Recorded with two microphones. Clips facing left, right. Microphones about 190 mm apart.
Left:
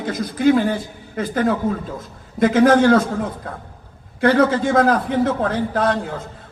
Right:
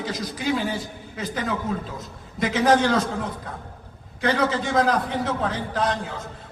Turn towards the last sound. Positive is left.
turn(degrees=55)  # may be behind; listen again after turning